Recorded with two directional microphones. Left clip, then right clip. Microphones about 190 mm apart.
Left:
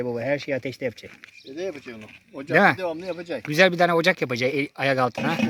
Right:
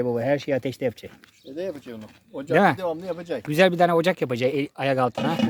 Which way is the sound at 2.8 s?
35° right (ahead or behind).